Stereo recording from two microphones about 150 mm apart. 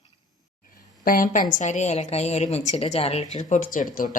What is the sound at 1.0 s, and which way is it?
Speech, 70° left (ahead or behind).